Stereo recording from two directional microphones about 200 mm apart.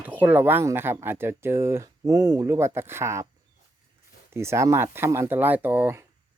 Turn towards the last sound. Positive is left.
turn(degrees=-10)  # may be behind; listen again after turning